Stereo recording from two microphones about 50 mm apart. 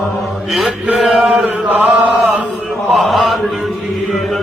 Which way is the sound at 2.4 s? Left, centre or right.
Right.